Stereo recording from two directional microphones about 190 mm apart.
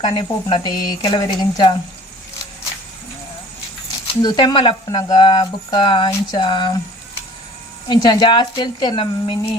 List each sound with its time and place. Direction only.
0.0 s speech: 25° left (ahead or behind)
4.2 s speech: 25° left (ahead or behind)
7.9 s speech: 25° left (ahead or behind)